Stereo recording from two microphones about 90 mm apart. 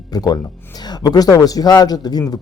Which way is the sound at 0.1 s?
45° left (ahead or behind).